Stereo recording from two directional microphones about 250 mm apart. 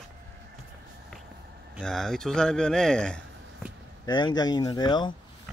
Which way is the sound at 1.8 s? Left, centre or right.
Centre.